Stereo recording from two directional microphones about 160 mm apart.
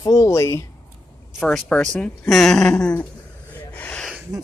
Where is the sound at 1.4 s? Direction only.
5° left (ahead or behind).